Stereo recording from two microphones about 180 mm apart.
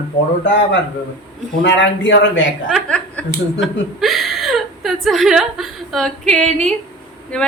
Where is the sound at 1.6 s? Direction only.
85° left.